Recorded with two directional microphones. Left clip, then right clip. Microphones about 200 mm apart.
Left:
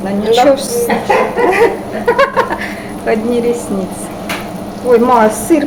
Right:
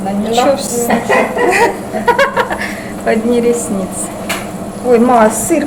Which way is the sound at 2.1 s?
5° left (ahead or behind).